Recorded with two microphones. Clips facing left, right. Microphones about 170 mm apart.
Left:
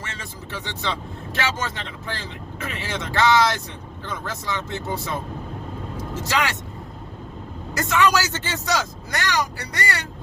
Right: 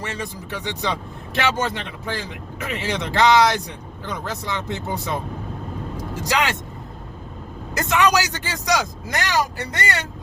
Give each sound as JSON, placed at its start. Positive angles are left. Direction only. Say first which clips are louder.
{"t": 0.0, "sound": "a man's voice", "louder": "right 6 dB", "side_deg": -15}
{"t": 7.8, "sound": "a man's voice", "louder": "right 1 dB", "side_deg": -20}